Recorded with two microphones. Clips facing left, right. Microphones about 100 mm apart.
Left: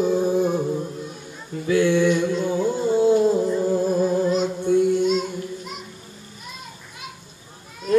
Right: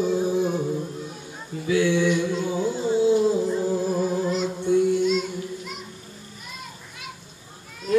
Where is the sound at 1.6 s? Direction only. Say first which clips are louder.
Left 3 dB; 50° left (ahead or behind).